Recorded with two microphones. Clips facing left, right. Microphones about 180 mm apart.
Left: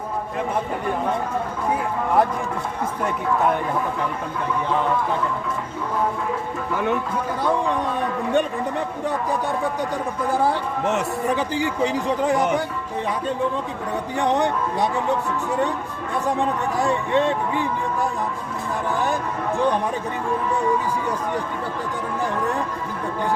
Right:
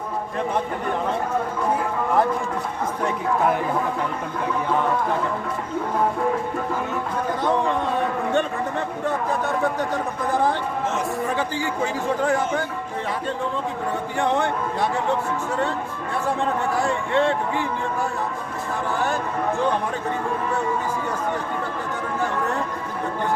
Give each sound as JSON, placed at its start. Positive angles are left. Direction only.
{"t": 10.3, "sound": "a man's voice", "side_deg": 10}
{"t": 14.2, "sound": "a man's voice", "side_deg": 15}
{"t": 17.1, "sound": "a man's voice", "side_deg": 15}